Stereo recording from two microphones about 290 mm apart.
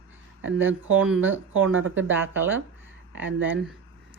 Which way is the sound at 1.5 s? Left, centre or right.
Right.